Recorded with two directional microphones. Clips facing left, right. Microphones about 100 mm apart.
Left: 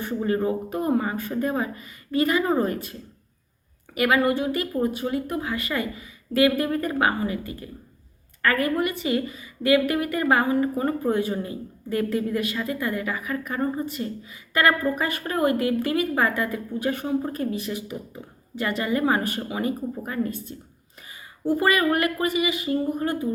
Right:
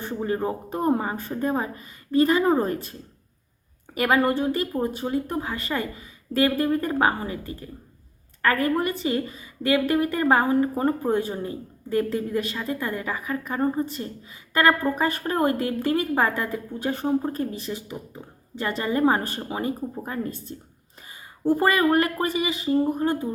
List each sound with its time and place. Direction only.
0.4 s a woman's voice: 30° right (ahead or behind)
3.9 s a woman's voice: 35° right (ahead or behind)
21.6 s a woman's voice: 30° right (ahead or behind)